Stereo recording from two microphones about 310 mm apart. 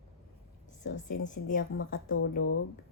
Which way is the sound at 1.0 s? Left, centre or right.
Left.